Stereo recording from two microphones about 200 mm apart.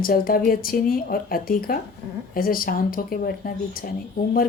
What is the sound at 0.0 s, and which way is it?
A woman's voice, 45° left (ahead or behind).